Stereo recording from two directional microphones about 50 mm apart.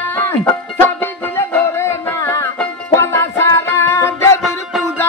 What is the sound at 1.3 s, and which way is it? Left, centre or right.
Music, left.